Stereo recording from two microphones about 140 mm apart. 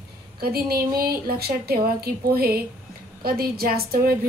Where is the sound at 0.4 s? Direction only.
90° right.